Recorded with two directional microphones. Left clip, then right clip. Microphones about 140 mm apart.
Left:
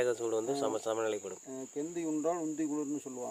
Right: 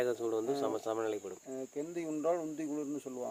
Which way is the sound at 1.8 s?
10° right (ahead or behind).